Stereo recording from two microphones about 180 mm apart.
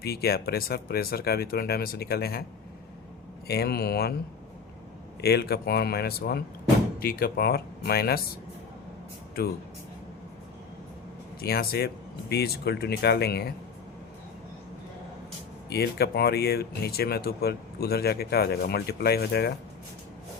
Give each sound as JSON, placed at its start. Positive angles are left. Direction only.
{"t": 0.0, "sound": "speech", "side_deg": 60}
{"t": 3.4, "sound": "speech", "side_deg": 60}
{"t": 5.2, "sound": "speech", "side_deg": 65}
{"t": 11.3, "sound": "speech", "side_deg": 60}
{"t": 15.7, "sound": "speech", "side_deg": 65}